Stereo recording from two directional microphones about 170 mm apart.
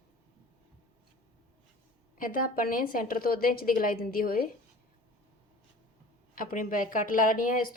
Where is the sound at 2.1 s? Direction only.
55° left (ahead or behind).